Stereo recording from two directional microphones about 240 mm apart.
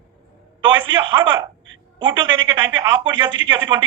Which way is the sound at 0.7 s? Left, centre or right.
Centre.